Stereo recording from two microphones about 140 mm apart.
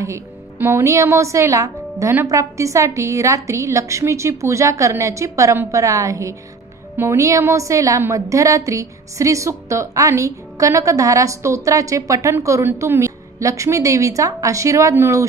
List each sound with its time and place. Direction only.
0.0 s a woman's voice: 20° right (ahead or behind)